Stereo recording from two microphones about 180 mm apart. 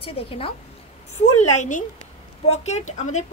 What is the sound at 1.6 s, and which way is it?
A woman's voice, 45° left (ahead or behind).